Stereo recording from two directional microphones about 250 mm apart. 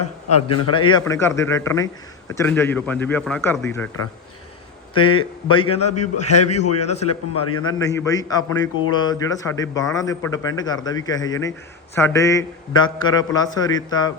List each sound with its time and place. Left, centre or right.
0.0 s a sound: left
0.8 s speech: centre
4.9 s a man's voice: centre
5.8 s a man's voice: left
6.8 s a man's voice: left
7.1 s a man's voice: left
7.7 s speech: centre